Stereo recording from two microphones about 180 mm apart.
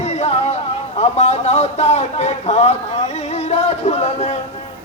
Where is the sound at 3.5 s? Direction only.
35° left (ahead or behind).